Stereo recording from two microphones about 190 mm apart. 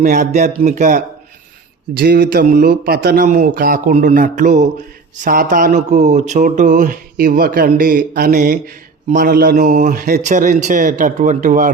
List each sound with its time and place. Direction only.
0.0 s speech: 40° right (ahead or behind)
1.9 s speech: 55° right (ahead or behind)